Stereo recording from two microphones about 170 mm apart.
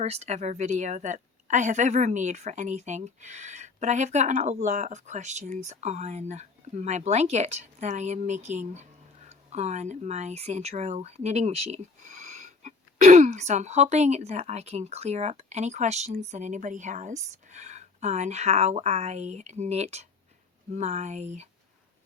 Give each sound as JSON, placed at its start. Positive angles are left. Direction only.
{"t": 0.0, "sound": "a woman's voice", "side_deg": -40}